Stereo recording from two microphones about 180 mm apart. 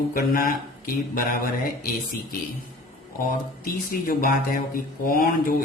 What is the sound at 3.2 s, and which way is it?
Speech, 50° left (ahead or behind).